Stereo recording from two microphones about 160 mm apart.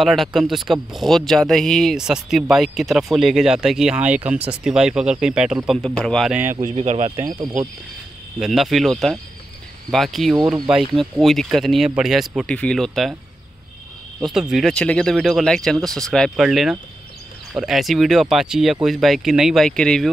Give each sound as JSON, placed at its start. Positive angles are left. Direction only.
{"t": 0.0, "sound": "speech", "side_deg": 0}
{"t": 6.7, "sound": "speech", "side_deg": -40}
{"t": 8.4, "sound": "speech", "side_deg": 0}
{"t": 14.2, "sound": "speech", "side_deg": 0}